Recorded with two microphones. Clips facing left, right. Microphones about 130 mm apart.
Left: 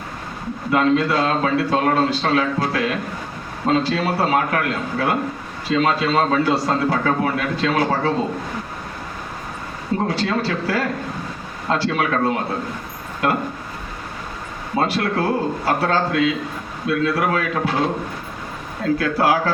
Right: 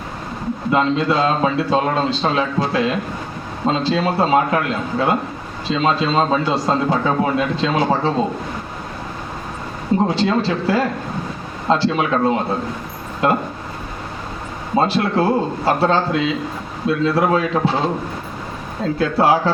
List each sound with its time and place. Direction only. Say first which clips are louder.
0.7 s speech: even; 25° right (ahead or behind)
10.1 s speech: right 3 dB; 25° right (ahead or behind)
14.8 s speech: right 3 dB; 25° right (ahead or behind)
18.9 s speech: right 4 dB; 25° right (ahead or behind)